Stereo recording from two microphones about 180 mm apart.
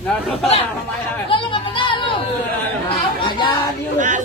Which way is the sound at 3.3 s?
25° left (ahead or behind).